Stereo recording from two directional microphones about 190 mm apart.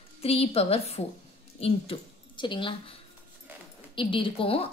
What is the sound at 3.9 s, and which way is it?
Speech, 30° left (ahead or behind).